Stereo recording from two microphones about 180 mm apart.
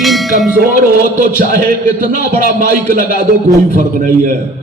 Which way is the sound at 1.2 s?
45° right (ahead or behind).